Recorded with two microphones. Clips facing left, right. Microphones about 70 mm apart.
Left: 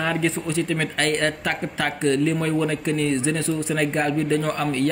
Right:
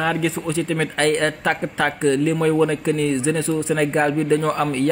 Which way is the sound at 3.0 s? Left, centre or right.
Centre.